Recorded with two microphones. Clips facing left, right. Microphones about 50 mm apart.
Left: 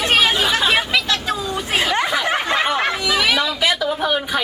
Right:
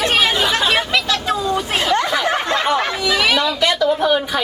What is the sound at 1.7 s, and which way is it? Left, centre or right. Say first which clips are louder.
Speech: left 1 dB; centre.